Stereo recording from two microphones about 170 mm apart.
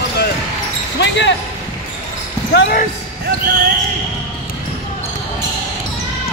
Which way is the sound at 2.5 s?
90° left.